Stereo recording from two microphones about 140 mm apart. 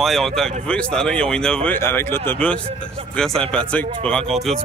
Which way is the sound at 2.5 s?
40° right (ahead or behind).